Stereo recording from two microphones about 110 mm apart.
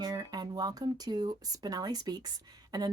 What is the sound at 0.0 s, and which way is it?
A woman's voice, 35° right (ahead or behind).